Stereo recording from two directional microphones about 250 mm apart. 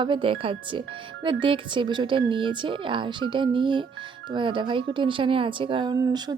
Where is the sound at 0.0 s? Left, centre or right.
Centre.